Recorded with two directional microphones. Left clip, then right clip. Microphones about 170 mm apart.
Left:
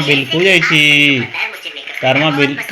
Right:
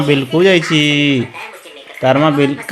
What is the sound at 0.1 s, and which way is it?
Speech, 30° right (ahead or behind).